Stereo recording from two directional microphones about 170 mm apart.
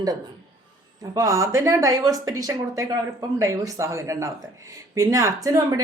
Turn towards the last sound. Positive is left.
turn(degrees=-20)  # may be behind; listen again after turning